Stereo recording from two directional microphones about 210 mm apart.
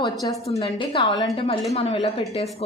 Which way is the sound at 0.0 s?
15° left (ahead or behind).